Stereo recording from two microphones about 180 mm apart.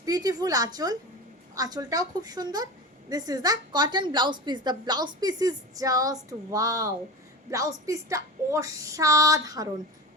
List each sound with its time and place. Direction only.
0.0 s a woman's voice: 20° right (ahead or behind)